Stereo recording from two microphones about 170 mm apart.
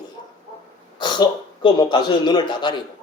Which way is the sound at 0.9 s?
25° left (ahead or behind).